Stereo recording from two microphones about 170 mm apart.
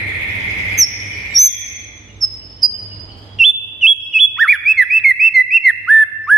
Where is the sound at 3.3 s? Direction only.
Centre (ahead or behind).